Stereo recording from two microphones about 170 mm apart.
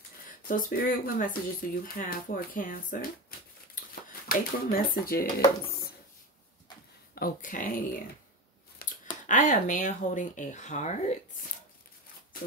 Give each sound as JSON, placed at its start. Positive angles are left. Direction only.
{"t": 0.5, "sound": "speech", "side_deg": 55}
{"t": 7.2, "sound": "speech", "side_deg": 55}
{"t": 8.8, "sound": "a sound", "side_deg": 60}
{"t": 9.3, "sound": "speech", "side_deg": 50}